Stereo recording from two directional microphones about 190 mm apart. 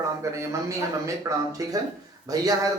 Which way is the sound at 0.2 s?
15° right (ahead or behind).